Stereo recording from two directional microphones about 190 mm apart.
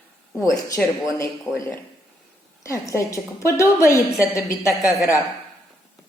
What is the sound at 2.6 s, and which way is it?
Speech, 15° left (ahead or behind).